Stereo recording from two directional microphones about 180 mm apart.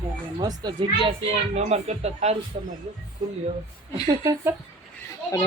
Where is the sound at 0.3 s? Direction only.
25° right (ahead or behind).